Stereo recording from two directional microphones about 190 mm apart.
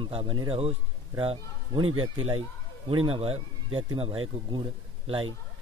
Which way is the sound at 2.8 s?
30° right (ahead or behind).